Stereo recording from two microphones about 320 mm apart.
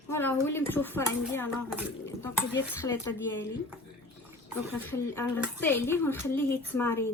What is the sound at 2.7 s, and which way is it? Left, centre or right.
Speech, centre.